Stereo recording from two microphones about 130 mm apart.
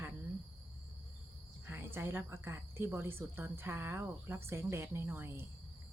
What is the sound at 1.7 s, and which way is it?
Speech, 15° right (ahead or behind).